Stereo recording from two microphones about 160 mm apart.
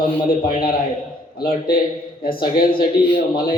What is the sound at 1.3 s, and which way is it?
Speech, 70° left (ahead or behind).